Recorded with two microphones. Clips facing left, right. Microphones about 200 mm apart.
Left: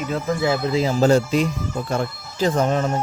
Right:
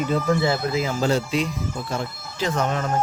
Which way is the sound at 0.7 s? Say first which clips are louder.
Left 5 dB; 40° left (ahead or behind).